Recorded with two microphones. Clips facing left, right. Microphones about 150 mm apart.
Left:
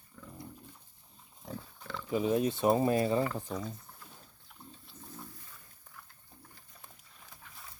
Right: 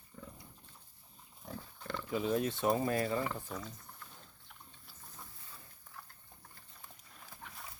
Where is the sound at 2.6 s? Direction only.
25° left (ahead or behind).